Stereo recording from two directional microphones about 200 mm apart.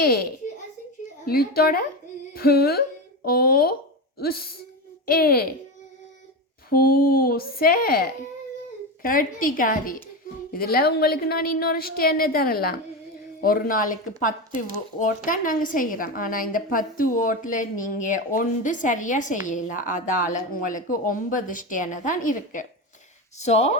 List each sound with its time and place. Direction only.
1.2 s a woman's voice: 50° left (ahead or behind)
6.7 s a woman's voice: 45° left (ahead or behind)